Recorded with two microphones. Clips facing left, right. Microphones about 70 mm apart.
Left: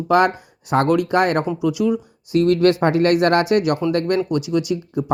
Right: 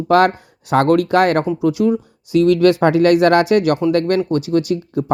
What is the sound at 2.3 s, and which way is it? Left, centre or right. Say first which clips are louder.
Speech: right 3 dB; right.